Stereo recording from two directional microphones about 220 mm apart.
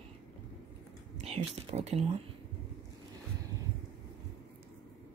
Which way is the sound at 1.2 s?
30° right (ahead or behind).